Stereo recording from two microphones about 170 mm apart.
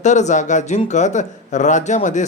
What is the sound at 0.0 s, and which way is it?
Speech, 45° left (ahead or behind).